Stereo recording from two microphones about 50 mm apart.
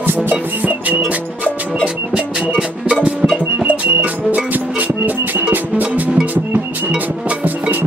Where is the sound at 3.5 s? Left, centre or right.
Right.